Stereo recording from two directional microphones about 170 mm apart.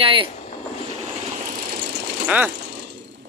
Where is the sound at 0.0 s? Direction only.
30° right (ahead or behind).